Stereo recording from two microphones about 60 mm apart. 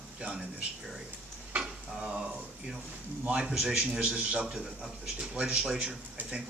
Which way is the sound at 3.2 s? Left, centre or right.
Centre.